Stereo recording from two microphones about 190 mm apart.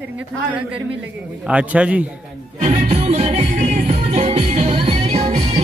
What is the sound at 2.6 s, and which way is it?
Music, 35° right (ahead or behind).